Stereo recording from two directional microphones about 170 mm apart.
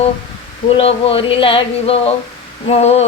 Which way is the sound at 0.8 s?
35° left (ahead or behind).